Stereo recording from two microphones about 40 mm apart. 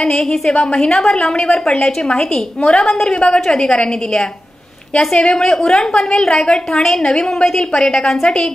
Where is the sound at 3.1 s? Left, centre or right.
Left.